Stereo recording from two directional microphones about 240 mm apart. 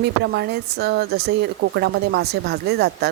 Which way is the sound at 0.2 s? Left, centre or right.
Right.